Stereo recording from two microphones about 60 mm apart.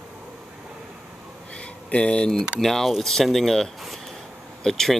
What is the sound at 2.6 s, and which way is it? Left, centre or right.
Speech, centre.